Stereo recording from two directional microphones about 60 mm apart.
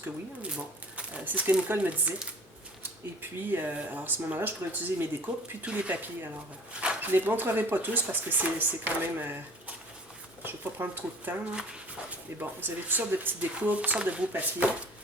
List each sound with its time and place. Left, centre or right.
0.4 s speech: centre
3.2 s speech: right
5.6 s speech: right
10.4 s speech: right
12.4 s speech: right